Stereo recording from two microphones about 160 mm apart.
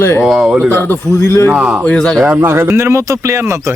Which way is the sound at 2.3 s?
15° right (ahead or behind).